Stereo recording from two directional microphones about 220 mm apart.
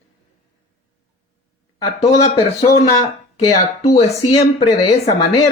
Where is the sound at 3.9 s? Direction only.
30° left (ahead or behind).